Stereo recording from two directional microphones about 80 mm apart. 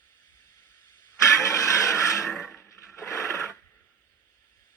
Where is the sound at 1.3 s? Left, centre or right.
Left.